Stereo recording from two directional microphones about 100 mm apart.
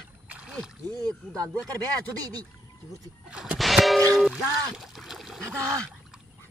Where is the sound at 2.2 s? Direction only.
40° right (ahead or behind).